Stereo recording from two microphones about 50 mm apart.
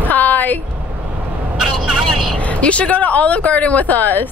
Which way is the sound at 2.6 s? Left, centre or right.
Left.